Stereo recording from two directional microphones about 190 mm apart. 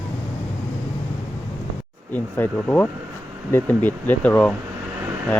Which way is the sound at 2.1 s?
10° left (ahead or behind).